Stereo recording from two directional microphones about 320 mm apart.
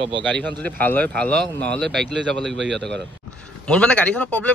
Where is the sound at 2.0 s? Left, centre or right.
Right.